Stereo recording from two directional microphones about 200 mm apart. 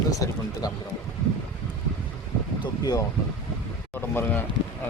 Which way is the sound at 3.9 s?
10° left (ahead or behind).